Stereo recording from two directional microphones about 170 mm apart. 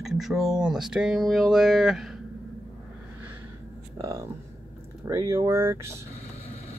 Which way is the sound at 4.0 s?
20° right (ahead or behind).